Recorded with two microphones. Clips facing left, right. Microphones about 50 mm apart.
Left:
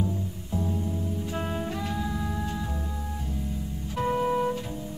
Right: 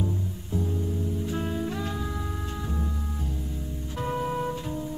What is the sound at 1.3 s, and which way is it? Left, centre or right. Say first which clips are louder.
Music: even; left.